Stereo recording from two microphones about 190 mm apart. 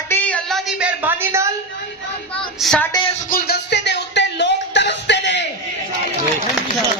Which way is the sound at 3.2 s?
50° left (ahead or behind).